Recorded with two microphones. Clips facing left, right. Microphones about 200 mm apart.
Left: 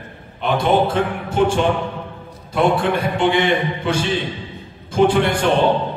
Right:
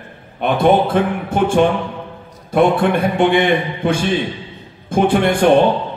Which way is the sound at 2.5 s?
55° right (ahead or behind).